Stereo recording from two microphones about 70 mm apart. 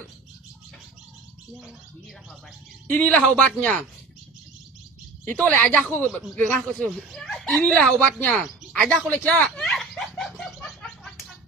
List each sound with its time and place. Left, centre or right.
2.9 s speech: left
5.4 s a woman's voice: centre
7.2 s a woman's voice: centre
9.1 s speech: centre
9.6 s a sound: centre